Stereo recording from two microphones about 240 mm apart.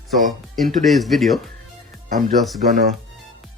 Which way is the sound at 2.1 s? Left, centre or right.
Right.